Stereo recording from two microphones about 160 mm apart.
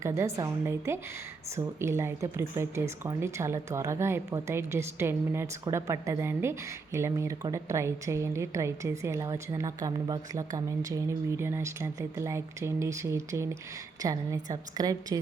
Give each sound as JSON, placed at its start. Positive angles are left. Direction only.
{"t": 0.0, "sound": "a woman's voice", "side_deg": -15}